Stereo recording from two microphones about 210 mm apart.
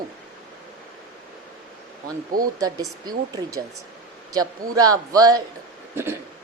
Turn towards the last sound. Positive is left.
turn(degrees=-10)  # may be behind; listen again after turning